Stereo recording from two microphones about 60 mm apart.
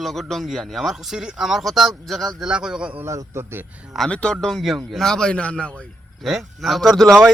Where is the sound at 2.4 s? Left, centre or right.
Centre.